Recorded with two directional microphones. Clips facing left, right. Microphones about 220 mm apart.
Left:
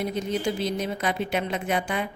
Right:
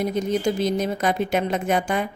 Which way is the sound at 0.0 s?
45° right (ahead or behind).